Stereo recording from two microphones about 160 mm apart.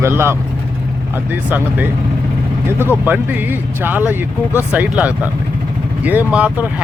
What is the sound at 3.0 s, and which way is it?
Speech, 10° right (ahead or behind).